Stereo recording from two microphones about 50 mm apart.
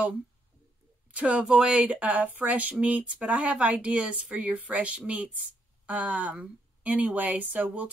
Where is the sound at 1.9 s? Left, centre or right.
Right.